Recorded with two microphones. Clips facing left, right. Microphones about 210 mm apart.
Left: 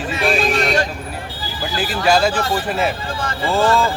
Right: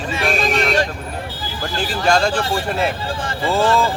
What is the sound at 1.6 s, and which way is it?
Speech, 5° left (ahead or behind).